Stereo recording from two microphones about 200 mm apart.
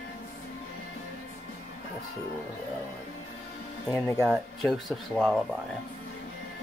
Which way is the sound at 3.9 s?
15° left (ahead or behind).